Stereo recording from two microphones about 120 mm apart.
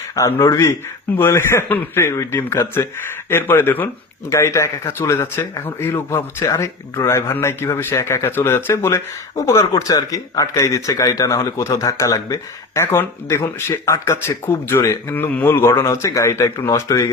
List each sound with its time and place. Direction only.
0.2 s speech: 25° left (ahead or behind)